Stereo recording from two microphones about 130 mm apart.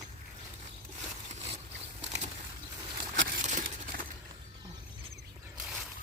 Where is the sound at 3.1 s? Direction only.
80° right.